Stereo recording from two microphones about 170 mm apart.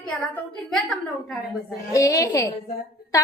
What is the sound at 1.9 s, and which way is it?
Speech, 20° left (ahead or behind).